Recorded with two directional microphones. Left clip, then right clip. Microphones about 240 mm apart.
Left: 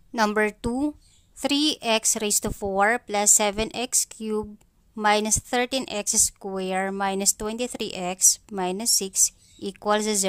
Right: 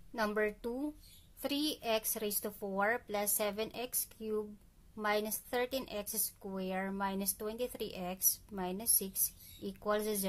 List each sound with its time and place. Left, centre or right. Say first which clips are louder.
0.1 s a woman's voice: left 12 dB; left